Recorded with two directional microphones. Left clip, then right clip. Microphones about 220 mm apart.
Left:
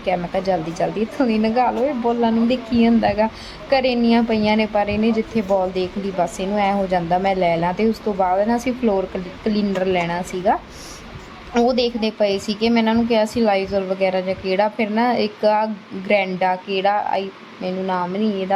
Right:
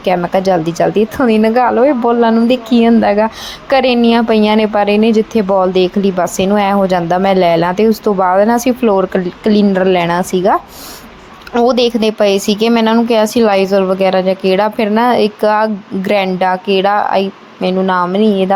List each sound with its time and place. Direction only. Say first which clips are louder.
0.0 s a woman's voice: right 9 dB; 20° right (ahead or behind)